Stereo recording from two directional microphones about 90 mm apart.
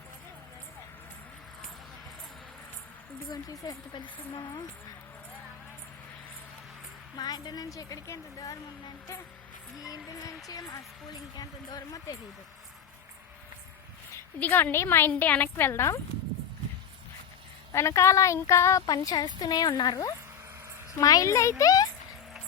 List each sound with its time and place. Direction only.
3.2 s speech: 45° left (ahead or behind)
7.2 s speech: 50° left (ahead or behind)
9.8 s speech: 40° left (ahead or behind)
14.3 s speech: 20° left (ahead or behind)
17.7 s a woman's voice: 35° left (ahead or behind)
18.9 s a woman's voice: 50° left (ahead or behind)